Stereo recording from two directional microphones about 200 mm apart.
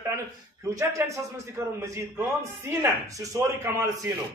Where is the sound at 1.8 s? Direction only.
10° right (ahead or behind).